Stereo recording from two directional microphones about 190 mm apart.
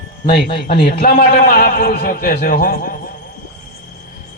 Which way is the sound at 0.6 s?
55° left (ahead or behind).